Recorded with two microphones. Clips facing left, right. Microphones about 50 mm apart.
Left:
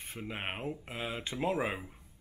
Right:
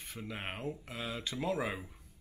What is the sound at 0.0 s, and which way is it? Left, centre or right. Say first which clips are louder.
Speech: left 3 dB; left.